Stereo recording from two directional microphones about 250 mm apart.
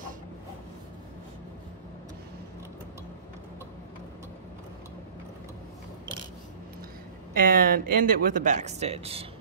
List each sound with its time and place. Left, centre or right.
7.3 s speech: right